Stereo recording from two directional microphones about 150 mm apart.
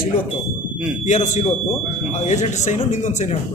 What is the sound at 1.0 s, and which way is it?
Speech, 55° left (ahead or behind).